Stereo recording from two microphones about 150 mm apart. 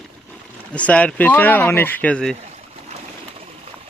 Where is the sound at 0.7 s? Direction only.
10° left (ahead or behind).